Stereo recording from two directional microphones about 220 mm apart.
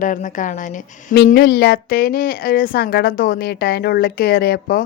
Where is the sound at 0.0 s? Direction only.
35° left (ahead or behind).